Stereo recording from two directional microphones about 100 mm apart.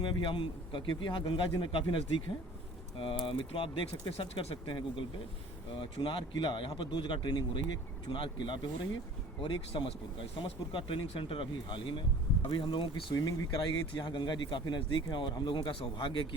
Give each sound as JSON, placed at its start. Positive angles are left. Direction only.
{"t": 0.0, "sound": "speech", "side_deg": 55}